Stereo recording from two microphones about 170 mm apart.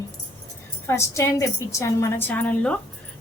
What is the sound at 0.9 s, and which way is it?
A woman's voice, 15° left (ahead or behind).